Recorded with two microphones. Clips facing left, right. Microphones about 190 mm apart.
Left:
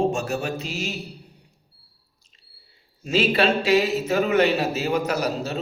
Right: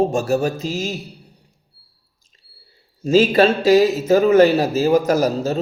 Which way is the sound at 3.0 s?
40° right (ahead or behind).